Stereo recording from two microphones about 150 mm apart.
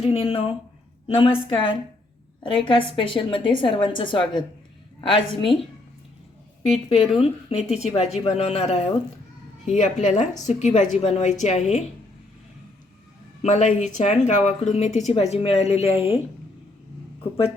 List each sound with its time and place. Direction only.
0.0 s a woman's voice: 40° left (ahead or behind)
7.2 s speech: 45° left (ahead or behind)
9.6 s a woman's voice: 55° left (ahead or behind)
13.4 s speech: 55° left (ahead or behind)